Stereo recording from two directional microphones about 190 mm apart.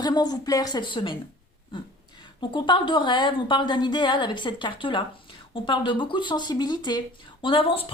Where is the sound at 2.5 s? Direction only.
25° left (ahead or behind).